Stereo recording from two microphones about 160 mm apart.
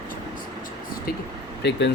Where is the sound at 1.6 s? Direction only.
90° left.